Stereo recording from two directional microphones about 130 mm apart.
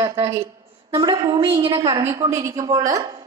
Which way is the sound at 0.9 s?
35° right (ahead or behind).